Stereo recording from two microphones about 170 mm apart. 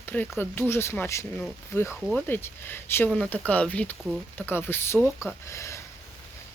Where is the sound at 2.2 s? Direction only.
10° left (ahead or behind).